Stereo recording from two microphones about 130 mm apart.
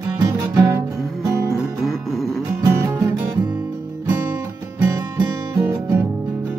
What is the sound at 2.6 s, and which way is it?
Music, 20° right (ahead or behind).